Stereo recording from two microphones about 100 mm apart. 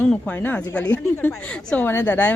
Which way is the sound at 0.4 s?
15° left (ahead or behind).